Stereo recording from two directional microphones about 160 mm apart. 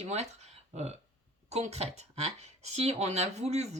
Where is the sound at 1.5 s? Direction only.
45° right (ahead or behind).